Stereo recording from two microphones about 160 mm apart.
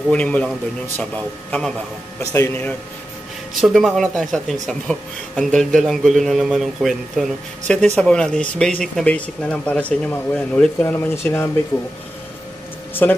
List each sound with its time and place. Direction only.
0.1 s speech: 5° left (ahead or behind)
3.6 s speech: centre (ahead or behind)
13.0 s speech: 10° left (ahead or behind)